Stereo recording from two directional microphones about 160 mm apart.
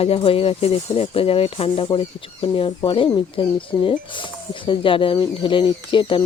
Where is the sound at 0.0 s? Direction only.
35° left (ahead or behind).